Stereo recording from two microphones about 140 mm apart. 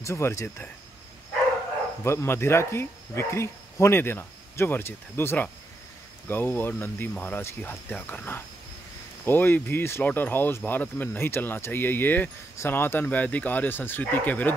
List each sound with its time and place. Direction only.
0.0 s speech: 20° left (ahead or behind)
2.0 s speech: 20° left (ahead or behind)